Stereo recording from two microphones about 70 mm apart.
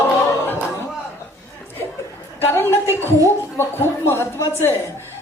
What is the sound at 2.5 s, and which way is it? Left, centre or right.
Speech, left.